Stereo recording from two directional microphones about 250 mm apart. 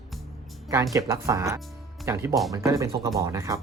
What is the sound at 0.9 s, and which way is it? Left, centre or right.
Speech, centre.